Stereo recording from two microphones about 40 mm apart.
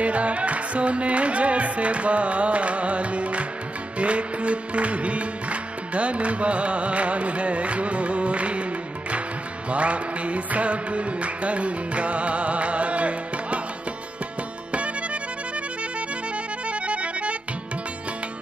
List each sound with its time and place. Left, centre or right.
0.0 s music: right
9.7 s music: right
16.8 s accordion: right